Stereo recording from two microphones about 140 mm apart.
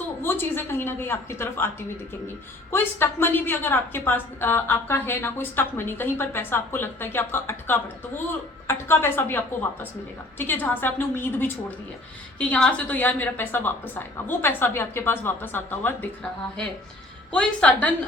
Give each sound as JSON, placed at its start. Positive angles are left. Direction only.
{"t": 0.2, "sound": "a woman's voice", "side_deg": 15}
{"t": 12.5, "sound": "a woman's voice", "side_deg": 5}
{"t": 17.3, "sound": "a woman's voice", "side_deg": 10}